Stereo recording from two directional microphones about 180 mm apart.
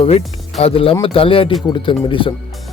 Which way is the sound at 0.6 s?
30° left (ahead or behind).